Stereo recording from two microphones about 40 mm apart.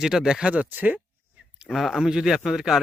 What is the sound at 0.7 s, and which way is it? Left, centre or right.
Speech, right.